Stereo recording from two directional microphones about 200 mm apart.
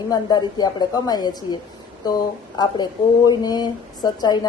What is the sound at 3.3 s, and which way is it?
A woman's voice, 20° left (ahead or behind).